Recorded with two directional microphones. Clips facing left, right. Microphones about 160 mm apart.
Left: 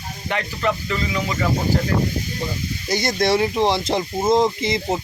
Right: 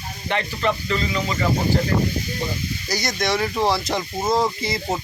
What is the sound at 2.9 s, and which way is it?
Speech, 25° left (ahead or behind).